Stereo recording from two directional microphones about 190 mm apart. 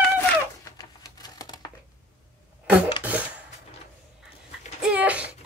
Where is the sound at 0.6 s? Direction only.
20° left (ahead or behind).